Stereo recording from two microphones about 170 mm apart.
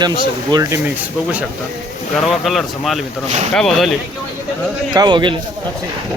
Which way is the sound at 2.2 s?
Centre (ahead or behind).